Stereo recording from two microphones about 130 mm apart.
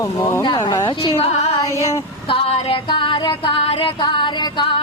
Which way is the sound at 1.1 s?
50° left (ahead or behind).